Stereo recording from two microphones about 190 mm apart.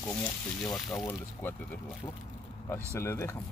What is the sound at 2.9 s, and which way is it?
Speech, 15° left (ahead or behind).